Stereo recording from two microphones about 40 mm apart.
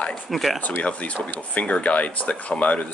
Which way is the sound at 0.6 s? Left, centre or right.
Left.